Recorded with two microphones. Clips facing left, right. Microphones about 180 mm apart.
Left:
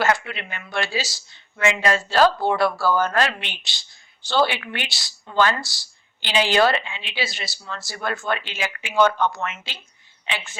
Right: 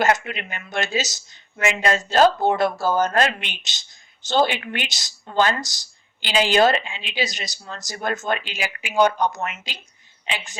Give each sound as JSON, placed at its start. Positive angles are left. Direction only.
{"t": 0.0, "sound": "a woman's voice", "side_deg": -20}